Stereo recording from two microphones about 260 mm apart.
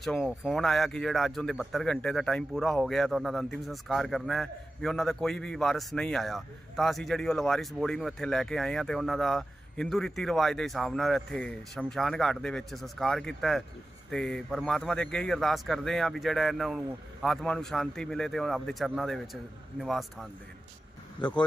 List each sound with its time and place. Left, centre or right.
0.0 s speech: centre
21.2 s speech: centre